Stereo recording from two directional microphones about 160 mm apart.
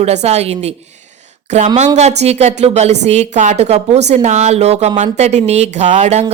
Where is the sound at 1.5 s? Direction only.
45° right (ahead or behind).